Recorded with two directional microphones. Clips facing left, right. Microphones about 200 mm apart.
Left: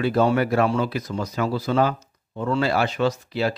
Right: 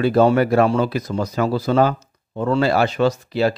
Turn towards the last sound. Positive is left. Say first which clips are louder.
# right 5 dB
turn(degrees=-40)  # may be behind; listen again after turning